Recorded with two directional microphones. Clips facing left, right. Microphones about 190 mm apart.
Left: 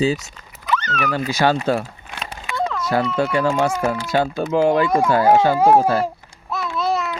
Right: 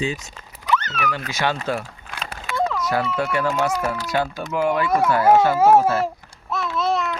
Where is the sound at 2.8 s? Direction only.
30° left (ahead or behind).